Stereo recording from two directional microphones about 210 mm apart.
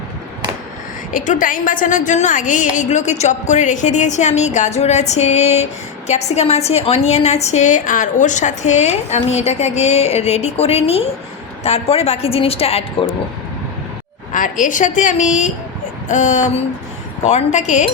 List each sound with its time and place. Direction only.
1.1 s a woman's voice: 40° left (ahead or behind)
14.3 s a woman's voice: 40° left (ahead or behind)